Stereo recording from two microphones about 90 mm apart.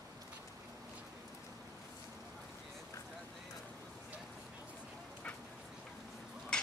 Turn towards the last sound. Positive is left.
turn(degrees=5)  # may be behind; listen again after turning